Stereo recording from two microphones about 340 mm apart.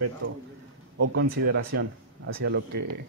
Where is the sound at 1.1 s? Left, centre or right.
Right.